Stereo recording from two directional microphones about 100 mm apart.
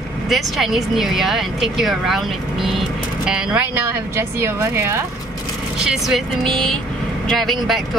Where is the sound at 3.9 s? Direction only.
20° right (ahead or behind).